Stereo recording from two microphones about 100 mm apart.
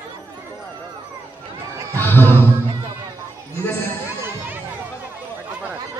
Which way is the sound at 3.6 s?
20° left (ahead or behind).